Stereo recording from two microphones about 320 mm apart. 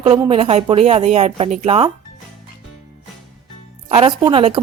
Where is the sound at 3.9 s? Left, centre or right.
Centre.